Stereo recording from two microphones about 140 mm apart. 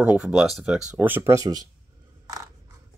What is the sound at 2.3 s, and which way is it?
Scissors, 25° right (ahead or behind).